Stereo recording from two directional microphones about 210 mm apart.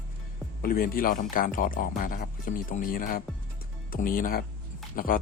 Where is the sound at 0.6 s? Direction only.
45° left (ahead or behind).